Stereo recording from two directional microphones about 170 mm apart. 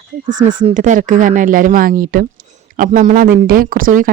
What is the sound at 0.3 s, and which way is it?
Speech, 50° right (ahead or behind).